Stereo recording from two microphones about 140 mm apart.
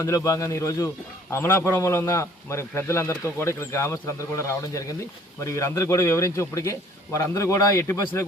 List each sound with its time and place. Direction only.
0.0 s a man's voice: 20° left (ahead or behind)